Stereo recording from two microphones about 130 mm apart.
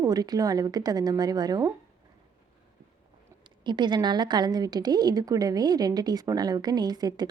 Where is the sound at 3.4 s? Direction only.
35° right (ahead or behind).